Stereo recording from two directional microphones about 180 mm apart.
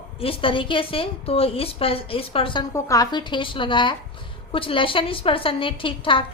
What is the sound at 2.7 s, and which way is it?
A woman's voice, 20° left (ahead or behind).